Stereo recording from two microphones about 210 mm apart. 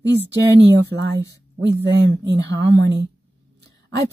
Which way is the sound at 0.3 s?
55° right (ahead or behind).